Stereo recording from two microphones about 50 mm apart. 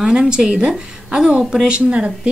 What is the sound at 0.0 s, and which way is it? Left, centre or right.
A woman's voice, centre.